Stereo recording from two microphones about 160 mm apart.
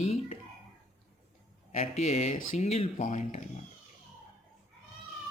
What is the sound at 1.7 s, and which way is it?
Speech, 40° left (ahead or behind).